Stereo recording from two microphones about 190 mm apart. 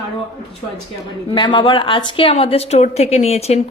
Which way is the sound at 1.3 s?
25° left (ahead or behind).